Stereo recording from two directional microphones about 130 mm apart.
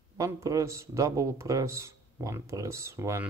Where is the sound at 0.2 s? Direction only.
25° right (ahead or behind).